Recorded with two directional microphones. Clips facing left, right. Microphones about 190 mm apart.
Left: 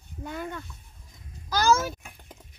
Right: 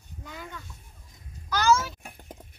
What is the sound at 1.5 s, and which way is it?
Speech, 35° left (ahead or behind).